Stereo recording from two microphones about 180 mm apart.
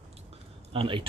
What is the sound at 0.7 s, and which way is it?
Speech, 30° right (ahead or behind).